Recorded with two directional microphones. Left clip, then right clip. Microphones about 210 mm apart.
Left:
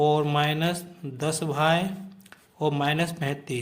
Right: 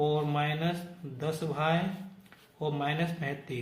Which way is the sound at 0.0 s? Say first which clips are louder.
Left 7 dB; 45° left (ahead or behind).